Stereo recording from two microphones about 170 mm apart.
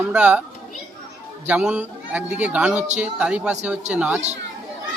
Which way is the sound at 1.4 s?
5° right (ahead or behind).